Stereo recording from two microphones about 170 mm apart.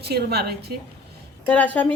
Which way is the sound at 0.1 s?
70° right (ahead or behind).